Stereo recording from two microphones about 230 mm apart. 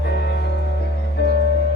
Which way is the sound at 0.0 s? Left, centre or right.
Left.